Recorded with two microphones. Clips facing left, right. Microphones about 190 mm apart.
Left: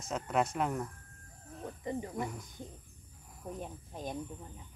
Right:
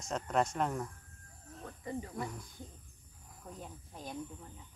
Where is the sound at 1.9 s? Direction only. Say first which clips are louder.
Left 3 dB; 20° left (ahead or behind).